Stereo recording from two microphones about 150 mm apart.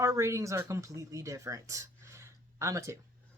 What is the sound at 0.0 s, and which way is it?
Speech, 20° right (ahead or behind).